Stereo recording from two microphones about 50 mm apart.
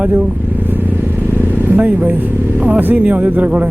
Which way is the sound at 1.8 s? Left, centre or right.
Right.